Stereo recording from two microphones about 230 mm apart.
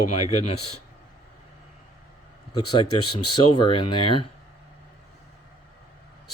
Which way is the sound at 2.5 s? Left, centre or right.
Centre.